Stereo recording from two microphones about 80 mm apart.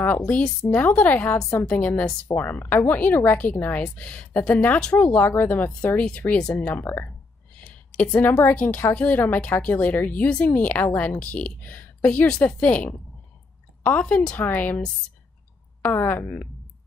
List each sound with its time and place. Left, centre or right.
0.0 s a woman's voice: left
6.8 s a woman's voice: left
15.9 s speech: left